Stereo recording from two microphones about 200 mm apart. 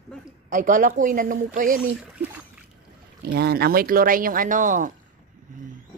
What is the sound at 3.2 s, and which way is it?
Speech, 50° right (ahead or behind).